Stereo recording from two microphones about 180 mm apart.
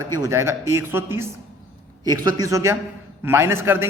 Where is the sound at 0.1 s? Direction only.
20° right (ahead or behind).